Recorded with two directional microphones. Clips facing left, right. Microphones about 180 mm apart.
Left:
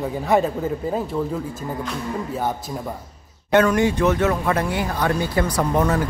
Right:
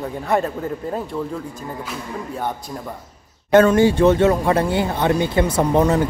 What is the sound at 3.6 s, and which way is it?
Speech, 30° right (ahead or behind).